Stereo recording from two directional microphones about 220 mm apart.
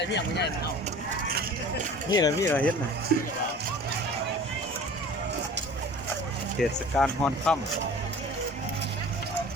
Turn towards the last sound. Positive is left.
turn(degrees=5)  # may be behind; listen again after turning